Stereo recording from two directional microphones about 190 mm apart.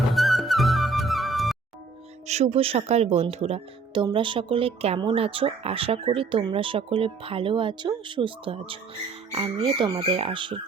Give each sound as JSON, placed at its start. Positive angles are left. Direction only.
{"t": 0.1, "sound": "music", "side_deg": 0}
{"t": 2.2, "sound": "speech", "side_deg": -35}